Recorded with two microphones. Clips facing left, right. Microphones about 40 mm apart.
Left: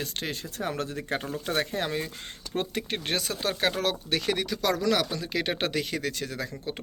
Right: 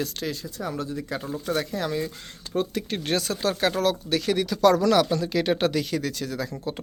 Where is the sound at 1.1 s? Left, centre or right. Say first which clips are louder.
Right 1 dB; left.